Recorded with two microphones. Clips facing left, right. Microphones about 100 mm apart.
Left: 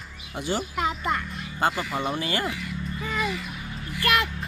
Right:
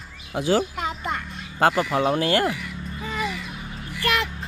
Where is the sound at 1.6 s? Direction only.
65° right (ahead or behind).